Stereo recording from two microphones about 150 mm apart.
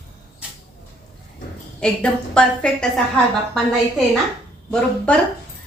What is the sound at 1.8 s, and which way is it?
A woman's voice, 5° left (ahead or behind).